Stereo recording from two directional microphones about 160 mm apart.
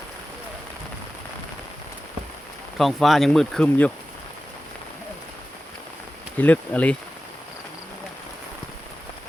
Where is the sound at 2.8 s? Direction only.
Centre (ahead or behind).